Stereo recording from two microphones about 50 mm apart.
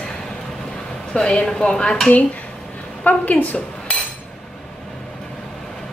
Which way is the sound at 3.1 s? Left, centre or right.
Left.